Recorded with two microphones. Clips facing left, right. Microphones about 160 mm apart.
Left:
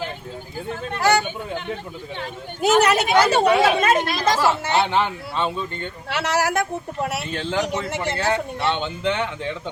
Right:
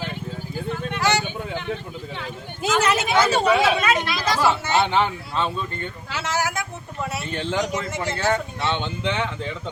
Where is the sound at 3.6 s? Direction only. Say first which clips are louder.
Left 3 dB; 50° left (ahead or behind).